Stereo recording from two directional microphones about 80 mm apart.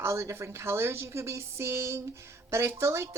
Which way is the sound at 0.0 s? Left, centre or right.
Right.